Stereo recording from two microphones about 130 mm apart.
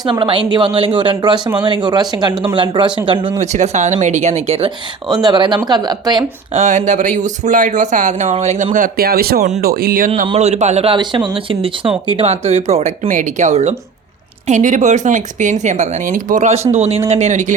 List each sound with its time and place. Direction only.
0.0 s speech: 40° right (ahead or behind)
3.3 s speech: 65° right (ahead or behind)
5.2 s speech: 35° right (ahead or behind)
6.5 s a man's voice: 65° right (ahead or behind)
10.3 s speech: 60° right (ahead or behind)
10.9 s speech: 40° right (ahead or behind); by 12.9 s 55° right (ahead or behind)
13.1 s a man's voice: 75° right (ahead or behind)
16.7 s speech: 55° right (ahead or behind)